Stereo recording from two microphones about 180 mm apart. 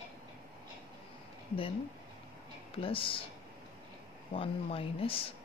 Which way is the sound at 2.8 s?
30° left (ahead or behind).